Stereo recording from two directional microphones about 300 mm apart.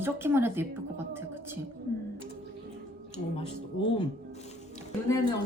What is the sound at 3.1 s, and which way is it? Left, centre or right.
Speech, centre.